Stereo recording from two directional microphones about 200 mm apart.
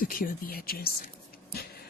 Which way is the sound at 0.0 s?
45° left (ahead or behind).